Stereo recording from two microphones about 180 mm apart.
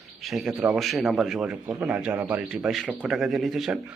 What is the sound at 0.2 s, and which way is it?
A man's voice, centre (ahead or behind).